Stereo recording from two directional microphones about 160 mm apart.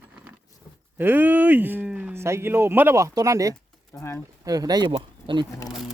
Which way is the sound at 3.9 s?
15° left (ahead or behind).